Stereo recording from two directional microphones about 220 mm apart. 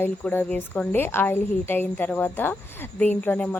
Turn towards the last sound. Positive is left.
turn(degrees=5)  # may be behind; listen again after turning